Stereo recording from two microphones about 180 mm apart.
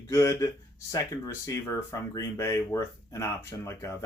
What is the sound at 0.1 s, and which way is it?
Speech, 15° left (ahead or behind).